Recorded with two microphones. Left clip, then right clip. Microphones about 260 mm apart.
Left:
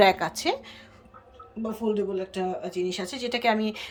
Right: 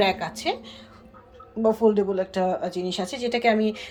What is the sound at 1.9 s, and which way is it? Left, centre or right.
A woman's voice, centre.